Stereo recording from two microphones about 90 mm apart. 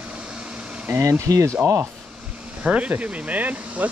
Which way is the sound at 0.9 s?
35° right (ahead or behind).